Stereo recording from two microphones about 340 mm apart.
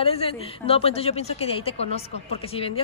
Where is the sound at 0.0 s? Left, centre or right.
Centre.